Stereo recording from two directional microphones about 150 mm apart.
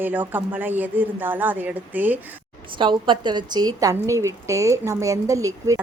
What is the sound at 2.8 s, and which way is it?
A woman's voice, 30° right (ahead or behind).